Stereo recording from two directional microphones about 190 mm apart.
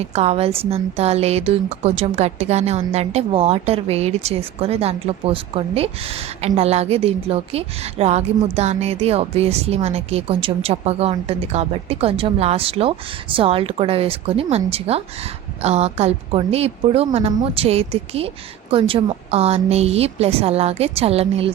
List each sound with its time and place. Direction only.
0.0 s a woman's voice: 35° right (ahead or behind)